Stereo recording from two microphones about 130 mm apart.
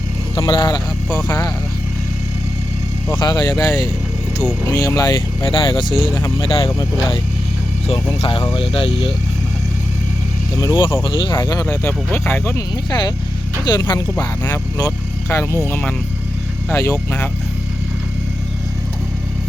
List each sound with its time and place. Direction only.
0.3 s speech: 30° left (ahead or behind)
3.2 s speech: 30° left (ahead or behind)
5.4 s speech: 40° left (ahead or behind)
8.7 s speech: 45° left (ahead or behind)
10.6 s speech: 30° left (ahead or behind)
11.3 s speech: 25° left (ahead or behind)
11.6 s speech: 15° left (ahead or behind)
12.9 s speech: 35° left (ahead or behind)
16.6 s speech: 20° left (ahead or behind)